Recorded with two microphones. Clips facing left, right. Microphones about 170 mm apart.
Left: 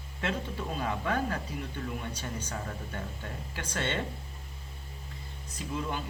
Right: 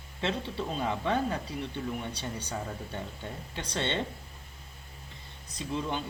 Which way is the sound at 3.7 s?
25° right (ahead or behind).